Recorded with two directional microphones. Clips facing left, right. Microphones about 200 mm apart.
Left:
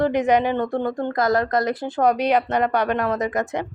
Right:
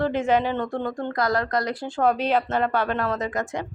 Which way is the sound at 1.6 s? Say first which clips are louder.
Left 4 dB; 55° left (ahead or behind).